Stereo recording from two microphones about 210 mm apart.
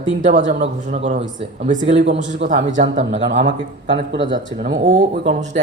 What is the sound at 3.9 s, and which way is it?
Speech, 60° right (ahead or behind).